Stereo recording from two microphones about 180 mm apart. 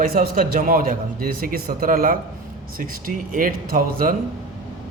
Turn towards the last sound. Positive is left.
turn(degrees=-50)  # may be behind; listen again after turning